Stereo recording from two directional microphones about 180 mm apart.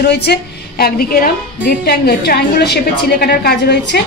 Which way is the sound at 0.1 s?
65° left (ahead or behind).